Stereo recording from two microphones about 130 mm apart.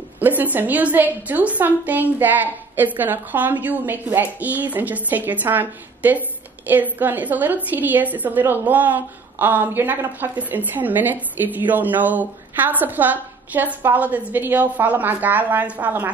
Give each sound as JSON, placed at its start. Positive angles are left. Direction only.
{"t": 0.2, "sound": "a woman's voice", "side_deg": -15}